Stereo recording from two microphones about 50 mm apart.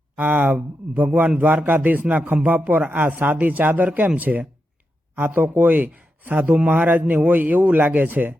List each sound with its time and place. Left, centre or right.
0.2 s a man's voice: right